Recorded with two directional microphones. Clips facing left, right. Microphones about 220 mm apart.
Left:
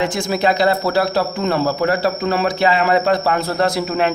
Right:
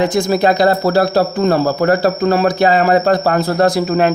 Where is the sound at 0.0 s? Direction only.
35° right (ahead or behind).